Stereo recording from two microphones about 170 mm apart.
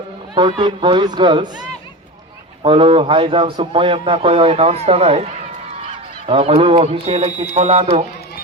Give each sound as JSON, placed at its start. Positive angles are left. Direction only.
{"t": 0.3, "sound": "speech", "side_deg": -25}
{"t": 2.6, "sound": "a man's voice", "side_deg": -30}